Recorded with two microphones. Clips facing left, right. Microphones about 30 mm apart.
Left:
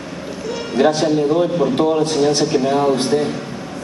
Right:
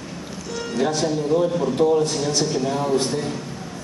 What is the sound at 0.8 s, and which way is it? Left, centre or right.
Speech, left.